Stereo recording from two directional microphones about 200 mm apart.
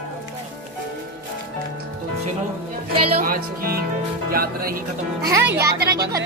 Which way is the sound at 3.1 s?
45° right (ahead or behind).